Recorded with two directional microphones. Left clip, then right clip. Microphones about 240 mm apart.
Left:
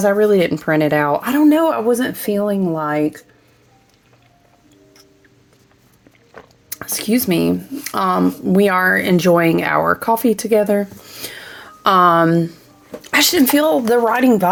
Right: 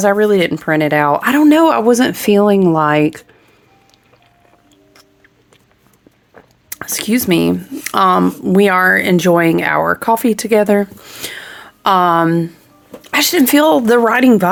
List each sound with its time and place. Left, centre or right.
0.0 s speech: centre; by 3.2 s right
6.7 s speech: centre
13.4 s speech: right